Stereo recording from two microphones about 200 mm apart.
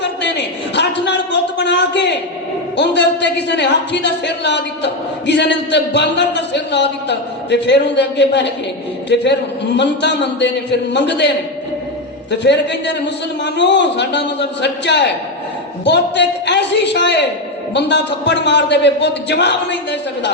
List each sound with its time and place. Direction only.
0.0 s a man's voice: 60° left (ahead or behind)
9.7 s a woman's voice: 60° left (ahead or behind)
12.3 s a woman's voice: 60° left (ahead or behind)